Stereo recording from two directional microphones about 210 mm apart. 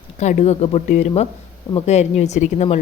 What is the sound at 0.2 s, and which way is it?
A woman's voice, 35° left (ahead or behind).